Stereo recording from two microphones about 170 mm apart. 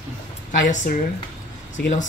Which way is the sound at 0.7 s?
50° left (ahead or behind).